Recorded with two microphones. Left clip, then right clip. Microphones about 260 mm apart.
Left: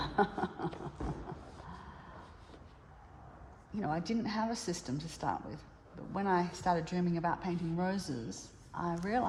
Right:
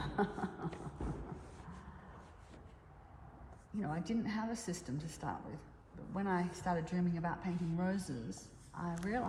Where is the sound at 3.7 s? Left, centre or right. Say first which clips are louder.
Left 5 dB; left.